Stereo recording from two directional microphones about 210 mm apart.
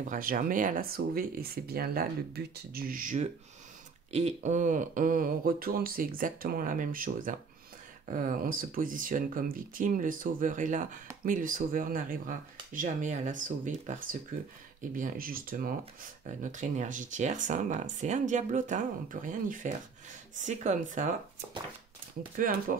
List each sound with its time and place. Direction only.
0.0 s speech: 40° right (ahead or behind)
4.4 s speech: 35° right (ahead or behind)
22.4 s speech: 40° right (ahead or behind)